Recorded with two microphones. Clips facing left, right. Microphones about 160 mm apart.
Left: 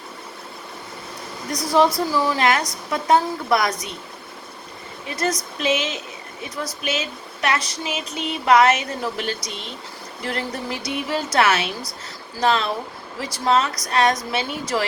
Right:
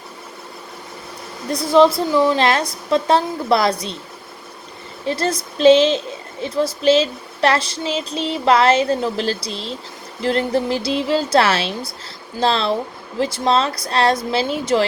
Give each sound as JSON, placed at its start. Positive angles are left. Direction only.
{"t": 1.5, "sound": "speech", "side_deg": -25}
{"t": 5.0, "sound": "speech", "side_deg": -30}